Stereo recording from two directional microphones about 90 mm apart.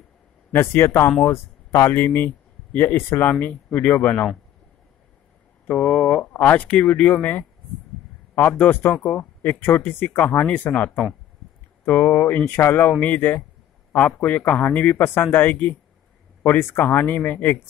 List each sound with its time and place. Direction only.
0.5 s speech: 25° left (ahead or behind)
5.8 s speech: 10° left (ahead or behind)
6.3 s speech: 20° left (ahead or behind)